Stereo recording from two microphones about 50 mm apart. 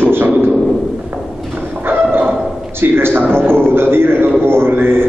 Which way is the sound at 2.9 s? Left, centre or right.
Right.